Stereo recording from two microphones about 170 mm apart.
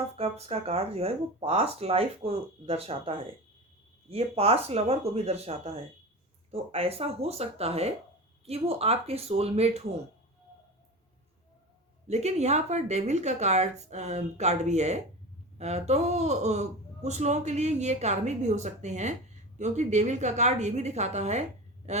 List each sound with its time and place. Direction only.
0.2 s speech: 35° right (ahead or behind)
12.0 s a woman's voice: 40° right (ahead or behind)